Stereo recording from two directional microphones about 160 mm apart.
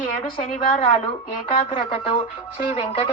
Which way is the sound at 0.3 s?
35° left (ahead or behind).